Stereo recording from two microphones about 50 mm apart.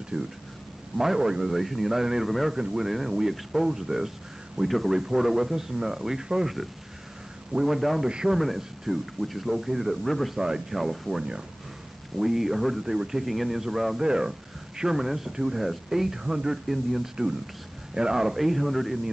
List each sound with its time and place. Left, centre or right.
0.1 s speech: right
0.9 s speech: centre
2.5 s speech: centre
7.5 s speech: centre
10.0 s speech: centre
10.3 s speech: centre